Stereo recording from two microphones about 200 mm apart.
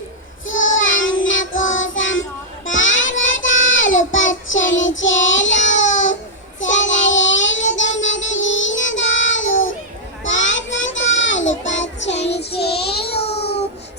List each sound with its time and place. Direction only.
0.4 s child singing: 75° left (ahead or behind)
12.3 s child singing: 55° left (ahead or behind)
13.2 s a sound: 30° left (ahead or behind)